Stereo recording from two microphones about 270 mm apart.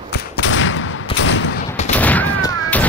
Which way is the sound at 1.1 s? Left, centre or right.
Left.